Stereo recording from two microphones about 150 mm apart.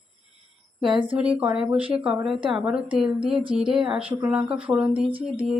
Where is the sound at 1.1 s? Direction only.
10° right (ahead or behind).